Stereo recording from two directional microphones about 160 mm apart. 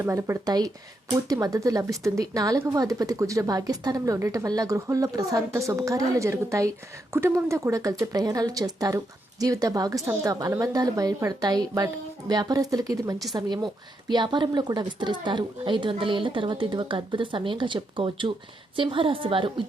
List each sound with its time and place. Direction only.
0.0 s speech: 15° right (ahead or behind); by 19.6 s 35° right (ahead or behind)